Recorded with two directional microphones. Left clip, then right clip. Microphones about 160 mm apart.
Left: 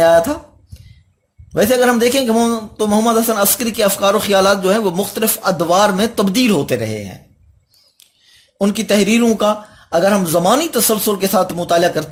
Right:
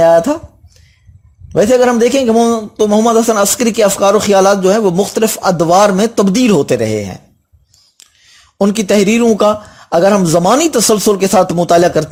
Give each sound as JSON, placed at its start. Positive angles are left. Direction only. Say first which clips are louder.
{"t": 0.0, "sound": "a man's voice", "louder": "right 3 dB", "side_deg": -30}
{"t": 1.5, "sound": "a man's voice", "louder": "right 4 dB", "side_deg": -35}